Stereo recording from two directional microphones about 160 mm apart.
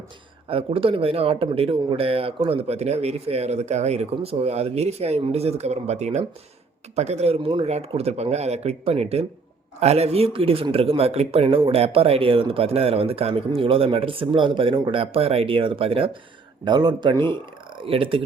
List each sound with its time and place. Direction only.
0.4 s a man's voice: 35° right (ahead or behind)